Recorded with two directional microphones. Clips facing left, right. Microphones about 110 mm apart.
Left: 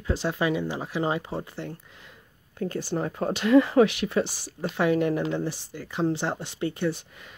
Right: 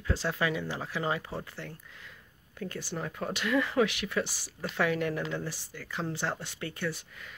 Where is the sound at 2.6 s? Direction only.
35° left (ahead or behind).